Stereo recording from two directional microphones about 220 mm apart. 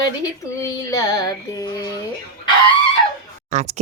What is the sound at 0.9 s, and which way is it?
Music, 15° left (ahead or behind).